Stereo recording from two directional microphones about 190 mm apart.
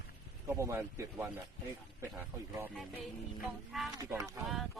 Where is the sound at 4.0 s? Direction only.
20° right (ahead or behind).